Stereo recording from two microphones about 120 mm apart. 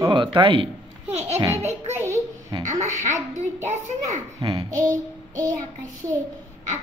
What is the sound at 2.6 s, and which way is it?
Speech, 90° right.